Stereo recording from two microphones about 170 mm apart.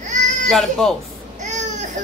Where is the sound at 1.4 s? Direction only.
45° right (ahead or behind).